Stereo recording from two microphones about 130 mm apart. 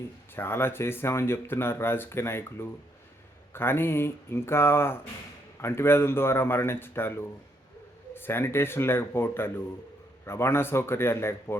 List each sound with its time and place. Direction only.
0.3 s a man's voice: 15° left (ahead or behind)